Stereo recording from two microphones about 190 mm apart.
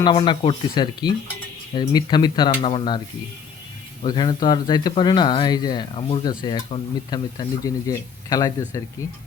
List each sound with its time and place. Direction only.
0.0 s speech: 25° left (ahead or behind)
4.0 s speech: 25° left (ahead or behind)